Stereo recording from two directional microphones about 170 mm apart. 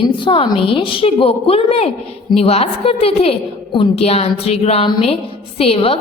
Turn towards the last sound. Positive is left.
turn(degrees=35)  # may be behind; listen again after turning